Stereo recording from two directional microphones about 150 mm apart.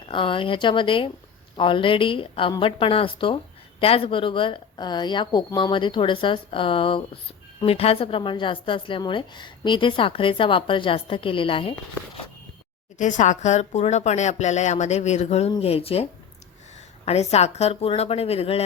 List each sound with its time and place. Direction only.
0.1 s a woman's voice: 35° left (ahead or behind)
13.0 s speech: 55° left (ahead or behind)
17.1 s speech: 45° left (ahead or behind)